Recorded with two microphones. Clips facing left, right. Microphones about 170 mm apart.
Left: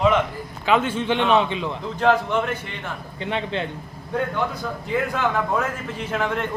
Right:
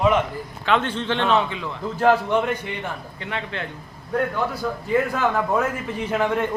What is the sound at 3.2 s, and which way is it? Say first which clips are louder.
Speech: left 5 dB; 25° left (ahead or behind).